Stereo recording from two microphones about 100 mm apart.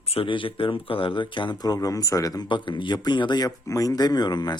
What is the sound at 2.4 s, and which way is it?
Speech, 55° left (ahead or behind).